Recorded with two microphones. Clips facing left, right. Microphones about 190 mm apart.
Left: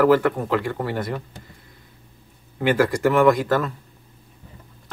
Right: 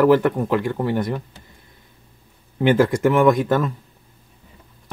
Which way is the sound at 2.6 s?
20° right (ahead or behind).